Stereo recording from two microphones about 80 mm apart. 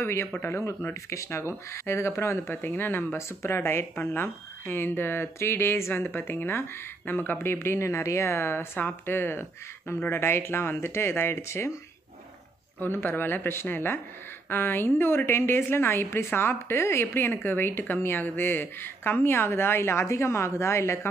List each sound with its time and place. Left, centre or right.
0.0 s speech: left
12.8 s a woman's voice: left